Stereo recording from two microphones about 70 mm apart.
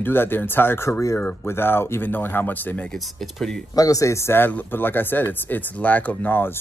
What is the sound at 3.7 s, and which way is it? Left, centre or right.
Speech, left.